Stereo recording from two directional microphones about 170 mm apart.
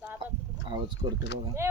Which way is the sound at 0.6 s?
30° right (ahead or behind).